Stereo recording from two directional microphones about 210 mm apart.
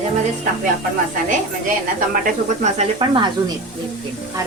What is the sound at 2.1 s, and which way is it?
Speech, 35° right (ahead or behind).